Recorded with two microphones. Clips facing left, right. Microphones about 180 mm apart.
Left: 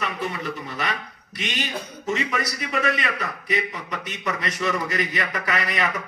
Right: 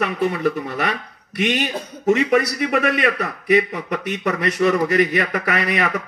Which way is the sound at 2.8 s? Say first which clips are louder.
Right 6 dB; 60° right (ahead or behind).